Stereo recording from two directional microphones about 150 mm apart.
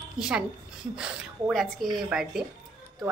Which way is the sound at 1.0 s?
Centre (ahead or behind).